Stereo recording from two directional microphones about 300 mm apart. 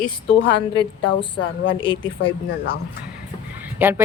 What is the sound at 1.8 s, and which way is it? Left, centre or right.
Mantra, centre.